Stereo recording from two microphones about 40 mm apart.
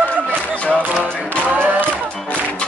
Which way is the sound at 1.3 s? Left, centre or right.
Right.